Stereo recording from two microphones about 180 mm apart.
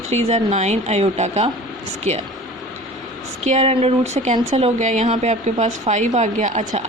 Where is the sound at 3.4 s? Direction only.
40° right (ahead or behind).